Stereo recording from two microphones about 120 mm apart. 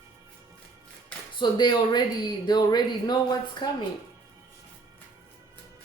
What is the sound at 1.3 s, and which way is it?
Speech, 40° left (ahead or behind).